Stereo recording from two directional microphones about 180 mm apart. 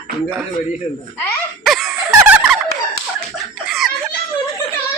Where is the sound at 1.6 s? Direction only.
Centre (ahead or behind).